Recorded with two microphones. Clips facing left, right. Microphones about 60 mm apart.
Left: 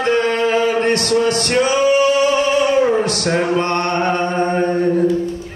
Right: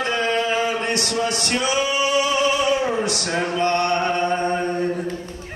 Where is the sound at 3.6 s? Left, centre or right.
Left.